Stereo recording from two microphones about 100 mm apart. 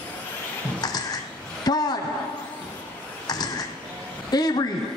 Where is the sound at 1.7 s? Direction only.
40° left (ahead or behind).